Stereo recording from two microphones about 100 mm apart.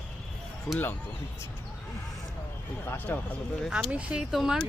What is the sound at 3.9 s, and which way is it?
Speech, 10° right (ahead or behind).